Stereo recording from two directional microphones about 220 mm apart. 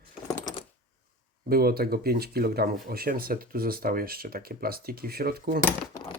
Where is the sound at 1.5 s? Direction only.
45° right (ahead or behind).